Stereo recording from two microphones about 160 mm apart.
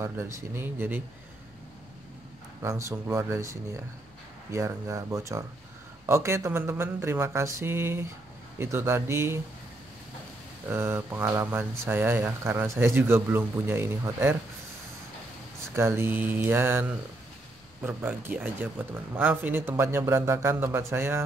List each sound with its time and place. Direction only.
0.0 s speech: 15° right (ahead or behind)
2.6 s speech: 20° right (ahead or behind)
10.7 s speech: 15° right (ahead or behind)
15.7 s speech: 15° right (ahead or behind)
17.8 s speech: 10° right (ahead or behind)